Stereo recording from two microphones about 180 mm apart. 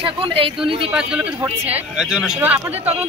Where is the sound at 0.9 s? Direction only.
5° right (ahead or behind).